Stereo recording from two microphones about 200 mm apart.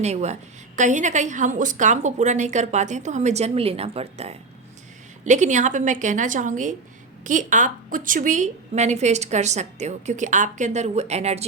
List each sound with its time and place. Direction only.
0.0 s a woman's voice: 35° right (ahead or behind)